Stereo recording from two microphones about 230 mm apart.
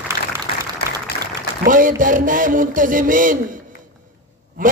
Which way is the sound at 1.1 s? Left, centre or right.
Left.